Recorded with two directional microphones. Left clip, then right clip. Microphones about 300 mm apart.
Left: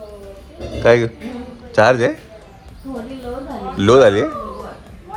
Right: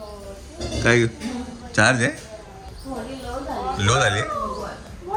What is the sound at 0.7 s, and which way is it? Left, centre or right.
Speech, centre.